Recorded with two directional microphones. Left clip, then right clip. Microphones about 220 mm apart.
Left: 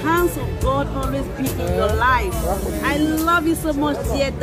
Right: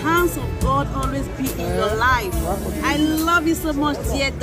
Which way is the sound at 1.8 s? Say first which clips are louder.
Left 1 dB; 5° left (ahead or behind).